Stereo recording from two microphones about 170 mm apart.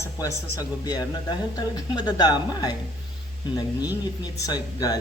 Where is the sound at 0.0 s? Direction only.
20° left (ahead or behind).